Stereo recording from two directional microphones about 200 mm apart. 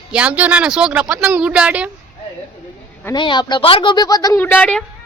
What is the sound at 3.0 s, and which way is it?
Speech, 20° left (ahead or behind).